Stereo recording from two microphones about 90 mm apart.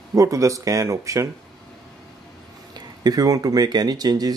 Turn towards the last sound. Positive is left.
turn(degrees=-45)  # may be behind; listen again after turning